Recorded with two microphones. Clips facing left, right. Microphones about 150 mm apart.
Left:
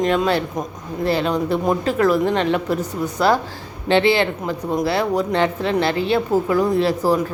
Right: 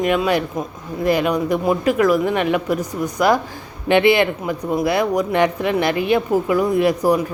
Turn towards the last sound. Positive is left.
turn(degrees=-15)  # may be behind; listen again after turning